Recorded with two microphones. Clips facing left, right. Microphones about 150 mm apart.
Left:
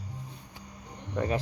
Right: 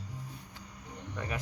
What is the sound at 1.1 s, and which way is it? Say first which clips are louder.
Speech: left 10 dB; 30° left (ahead or behind).